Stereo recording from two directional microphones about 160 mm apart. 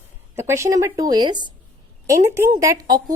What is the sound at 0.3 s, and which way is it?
A woman's voice, 15° right (ahead or behind).